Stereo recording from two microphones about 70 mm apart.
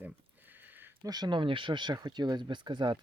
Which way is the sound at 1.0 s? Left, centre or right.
Right.